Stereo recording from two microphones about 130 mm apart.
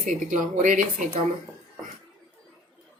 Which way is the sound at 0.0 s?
80° right.